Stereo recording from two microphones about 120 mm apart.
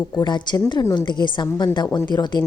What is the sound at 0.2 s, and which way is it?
A woman's voice, 40° left (ahead or behind).